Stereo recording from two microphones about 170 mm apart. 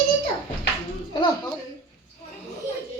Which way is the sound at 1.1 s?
25° left (ahead or behind).